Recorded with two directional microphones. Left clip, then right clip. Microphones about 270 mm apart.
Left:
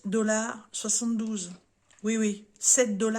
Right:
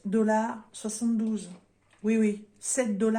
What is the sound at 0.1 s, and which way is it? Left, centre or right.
Speech, left.